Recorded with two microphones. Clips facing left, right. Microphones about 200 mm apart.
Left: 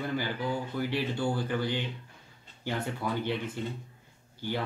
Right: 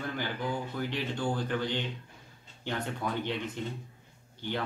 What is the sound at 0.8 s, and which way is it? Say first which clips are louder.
A man's voice: left 5 dB; 10° left (ahead or behind).